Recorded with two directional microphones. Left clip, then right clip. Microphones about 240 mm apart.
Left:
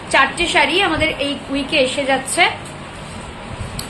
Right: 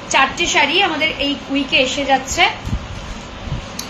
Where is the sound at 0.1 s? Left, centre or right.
Left.